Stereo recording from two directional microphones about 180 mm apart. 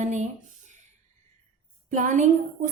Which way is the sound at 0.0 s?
40° right (ahead or behind).